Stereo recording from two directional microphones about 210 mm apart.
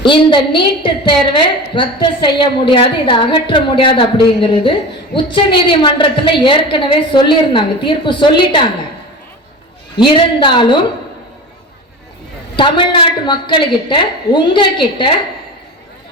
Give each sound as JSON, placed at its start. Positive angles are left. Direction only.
{"t": 0.0, "sound": "a woman's voice", "side_deg": 20}
{"t": 10.0, "sound": "a woman's voice", "side_deg": 20}
{"t": 12.5, "sound": "a woman's voice", "side_deg": 25}